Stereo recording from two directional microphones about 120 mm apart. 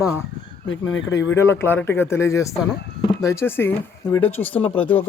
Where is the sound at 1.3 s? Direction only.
20° left (ahead or behind).